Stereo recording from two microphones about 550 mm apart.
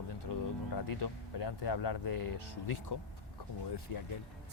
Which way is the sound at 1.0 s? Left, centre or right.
Left.